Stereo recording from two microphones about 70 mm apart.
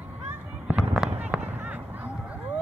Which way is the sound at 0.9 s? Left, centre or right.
Centre.